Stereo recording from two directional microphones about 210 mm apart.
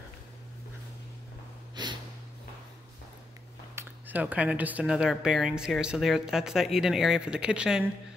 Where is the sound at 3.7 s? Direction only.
10° right (ahead or behind).